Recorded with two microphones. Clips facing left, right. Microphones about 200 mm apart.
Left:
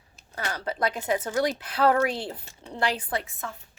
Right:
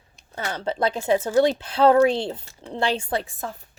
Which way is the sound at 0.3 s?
25° right (ahead or behind).